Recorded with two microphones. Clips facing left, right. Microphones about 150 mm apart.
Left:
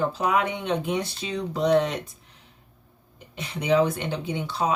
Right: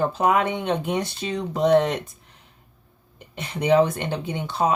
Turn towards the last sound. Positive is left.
turn(degrees=-50)  # may be behind; listen again after turning